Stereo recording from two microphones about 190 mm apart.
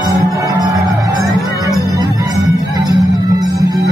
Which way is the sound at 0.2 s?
15° right (ahead or behind).